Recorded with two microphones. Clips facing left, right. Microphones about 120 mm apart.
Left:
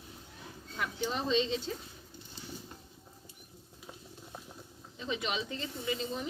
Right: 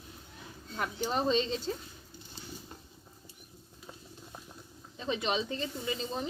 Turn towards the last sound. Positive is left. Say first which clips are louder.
# even
turn(degrees=-30)  # may be behind; listen again after turning